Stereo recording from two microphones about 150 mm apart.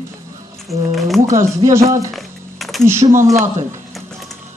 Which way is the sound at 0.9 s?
Centre (ahead or behind).